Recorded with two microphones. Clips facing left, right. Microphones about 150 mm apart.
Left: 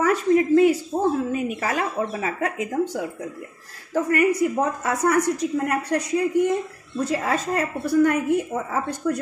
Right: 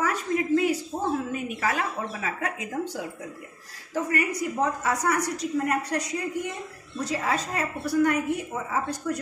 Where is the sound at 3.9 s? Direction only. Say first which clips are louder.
Left 7 dB; 50° left (ahead or behind).